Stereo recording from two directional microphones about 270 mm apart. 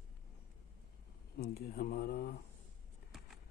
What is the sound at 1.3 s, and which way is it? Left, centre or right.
Speech, left.